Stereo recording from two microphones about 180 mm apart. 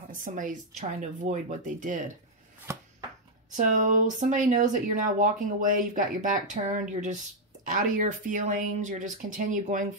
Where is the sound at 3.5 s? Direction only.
45° right (ahead or behind).